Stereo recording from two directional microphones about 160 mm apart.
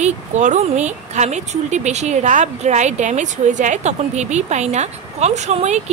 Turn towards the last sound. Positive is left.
turn(degrees=-45)  # may be behind; listen again after turning